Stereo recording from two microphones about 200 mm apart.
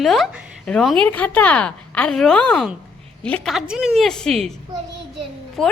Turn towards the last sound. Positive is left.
turn(degrees=0)  # may be behind; listen again after turning